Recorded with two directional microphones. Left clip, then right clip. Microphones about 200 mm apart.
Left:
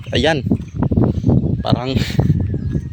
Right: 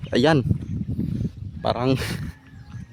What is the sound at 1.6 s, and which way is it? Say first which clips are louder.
Speech: left 2 dB; 20° right (ahead or behind).